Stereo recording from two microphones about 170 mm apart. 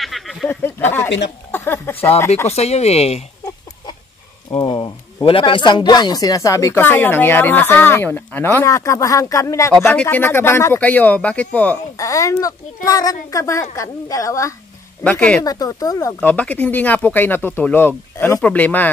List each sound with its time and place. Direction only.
0.0 s a sound: centre (ahead or behind)
0.5 s a sound: 10° left (ahead or behind)
2.0 s speech: 15° left (ahead or behind)
2.4 s speech: 40° left (ahead or behind)
4.5 s speech: 30° left (ahead or behind); by 11.8 s 10° left (ahead or behind)
12.0 s speech: 20° left (ahead or behind)
15.0 s speech: 5° left (ahead or behind)
15.4 s speech: 20° left (ahead or behind)
16.2 s speech: 10° left (ahead or behind)